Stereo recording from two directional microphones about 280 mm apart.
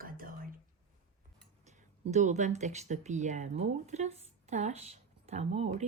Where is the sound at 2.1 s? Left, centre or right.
Right.